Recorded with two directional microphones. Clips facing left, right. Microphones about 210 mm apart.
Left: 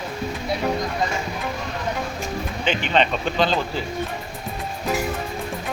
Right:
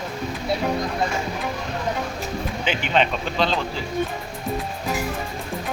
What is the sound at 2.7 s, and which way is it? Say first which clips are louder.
Speech: left 1 dB; 5° right (ahead or behind).